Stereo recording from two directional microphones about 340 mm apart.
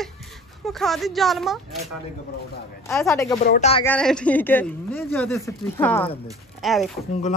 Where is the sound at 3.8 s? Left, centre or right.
Centre.